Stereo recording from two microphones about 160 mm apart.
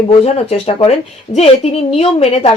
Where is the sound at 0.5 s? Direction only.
35° left (ahead or behind).